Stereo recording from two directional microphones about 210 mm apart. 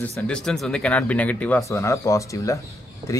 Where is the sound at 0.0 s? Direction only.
5° left (ahead or behind).